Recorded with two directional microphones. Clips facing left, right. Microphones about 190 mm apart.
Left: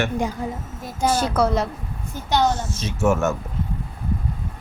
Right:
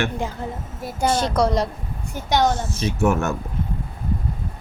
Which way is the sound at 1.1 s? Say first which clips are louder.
Even; 10° left (ahead or behind).